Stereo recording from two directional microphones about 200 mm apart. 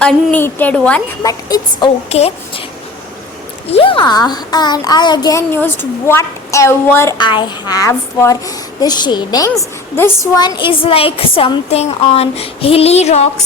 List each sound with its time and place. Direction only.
0.0 s a woman's voice: 5° left (ahead or behind)
1.2 s a child's voice: 20° left (ahead or behind)
2.0 s a child's voice: 30° left (ahead or behind)
3.7 s a child's voice: 25° left (ahead or behind)